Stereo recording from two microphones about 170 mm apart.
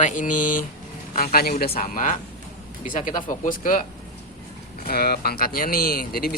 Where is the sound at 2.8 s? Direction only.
50° left (ahead or behind).